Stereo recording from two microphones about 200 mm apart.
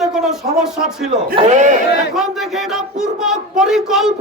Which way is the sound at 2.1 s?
Centre (ahead or behind).